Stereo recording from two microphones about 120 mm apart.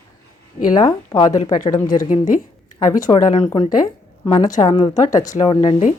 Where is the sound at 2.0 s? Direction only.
90° left.